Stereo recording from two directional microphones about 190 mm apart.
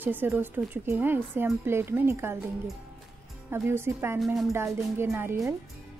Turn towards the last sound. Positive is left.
turn(degrees=-15)  # may be behind; listen again after turning